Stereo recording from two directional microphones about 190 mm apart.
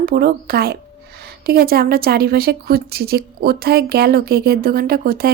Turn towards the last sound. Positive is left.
turn(degrees=-50)  # may be behind; listen again after turning